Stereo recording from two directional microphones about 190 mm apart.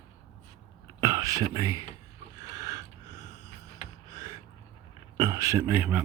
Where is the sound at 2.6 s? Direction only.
20° right (ahead or behind).